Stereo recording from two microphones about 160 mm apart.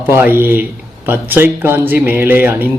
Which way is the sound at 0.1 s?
15° right (ahead or behind).